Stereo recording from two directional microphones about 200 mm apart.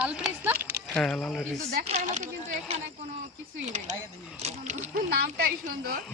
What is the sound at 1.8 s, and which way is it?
Speech, 35° right (ahead or behind).